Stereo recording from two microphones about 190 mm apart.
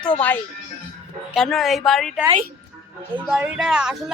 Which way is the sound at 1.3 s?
Centre (ahead or behind).